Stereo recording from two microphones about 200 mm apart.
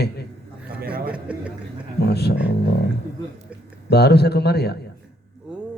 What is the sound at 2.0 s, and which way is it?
Speech, 55° left (ahead or behind).